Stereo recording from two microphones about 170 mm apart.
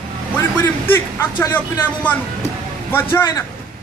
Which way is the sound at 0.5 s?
10° left (ahead or behind).